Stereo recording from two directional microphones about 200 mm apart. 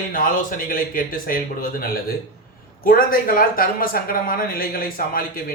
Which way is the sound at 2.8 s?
45° left (ahead or behind).